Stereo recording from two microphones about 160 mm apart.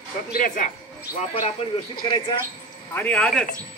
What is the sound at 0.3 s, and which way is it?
Speech, 60° left (ahead or behind).